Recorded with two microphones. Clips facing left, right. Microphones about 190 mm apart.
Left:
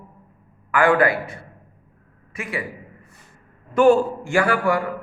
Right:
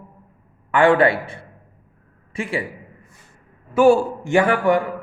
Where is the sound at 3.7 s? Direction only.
10° right (ahead or behind).